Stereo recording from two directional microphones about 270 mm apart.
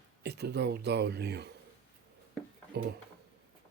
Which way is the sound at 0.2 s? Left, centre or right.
Right.